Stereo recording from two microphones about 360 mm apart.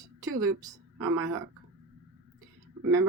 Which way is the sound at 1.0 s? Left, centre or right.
Right.